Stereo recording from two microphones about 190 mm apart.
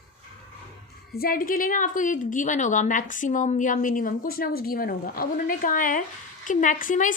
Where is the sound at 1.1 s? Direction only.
50° left (ahead or behind).